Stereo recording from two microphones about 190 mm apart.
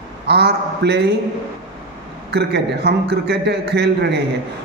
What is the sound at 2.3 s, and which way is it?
A man's voice, 60° right (ahead or behind).